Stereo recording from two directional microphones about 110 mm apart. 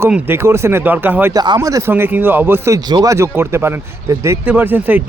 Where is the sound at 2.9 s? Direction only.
35° right (ahead or behind).